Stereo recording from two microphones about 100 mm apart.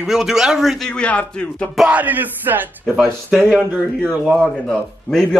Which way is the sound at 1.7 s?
10° right (ahead or behind).